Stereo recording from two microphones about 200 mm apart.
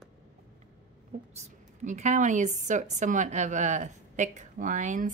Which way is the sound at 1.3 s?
35° right (ahead or behind).